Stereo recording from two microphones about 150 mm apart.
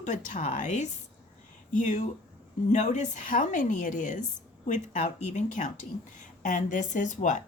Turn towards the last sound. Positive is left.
turn(degrees=55)  # may be behind; listen again after turning